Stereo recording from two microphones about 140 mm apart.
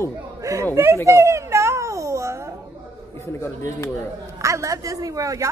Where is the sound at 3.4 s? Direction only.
20° left (ahead or behind).